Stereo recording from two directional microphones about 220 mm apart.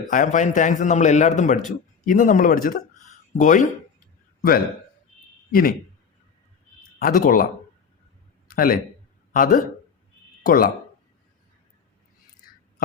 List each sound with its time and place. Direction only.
0.1 s a man's voice: 35° left (ahead or behind)
5.5 s a man's voice: 40° left (ahead or behind)
7.0 s a man's voice: 40° left (ahead or behind)
8.4 s a man's voice: 40° left (ahead or behind)